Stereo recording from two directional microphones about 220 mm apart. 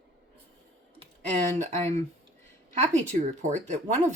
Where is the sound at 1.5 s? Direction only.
35° right (ahead or behind).